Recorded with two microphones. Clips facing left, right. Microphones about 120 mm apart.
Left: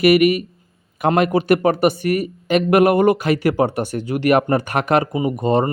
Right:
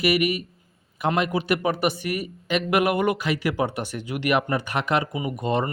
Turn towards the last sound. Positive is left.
turn(degrees=35)  # may be behind; listen again after turning